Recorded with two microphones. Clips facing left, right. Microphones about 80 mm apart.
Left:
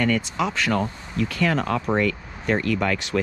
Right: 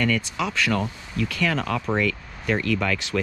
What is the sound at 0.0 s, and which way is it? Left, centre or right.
Speech, left.